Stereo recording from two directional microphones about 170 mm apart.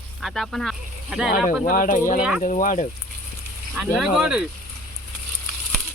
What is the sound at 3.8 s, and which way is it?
Speech, centre (ahead or behind).